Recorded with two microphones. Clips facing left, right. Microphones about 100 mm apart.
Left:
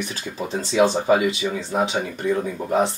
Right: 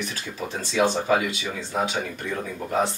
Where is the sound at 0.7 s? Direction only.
25° left (ahead or behind).